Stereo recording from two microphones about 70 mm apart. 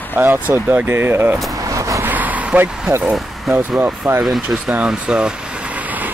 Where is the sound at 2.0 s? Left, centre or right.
Right.